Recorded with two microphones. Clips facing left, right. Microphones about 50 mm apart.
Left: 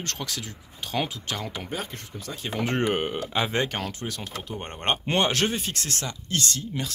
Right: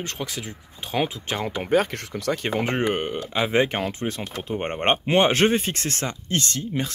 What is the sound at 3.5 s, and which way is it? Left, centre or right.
Speech, centre.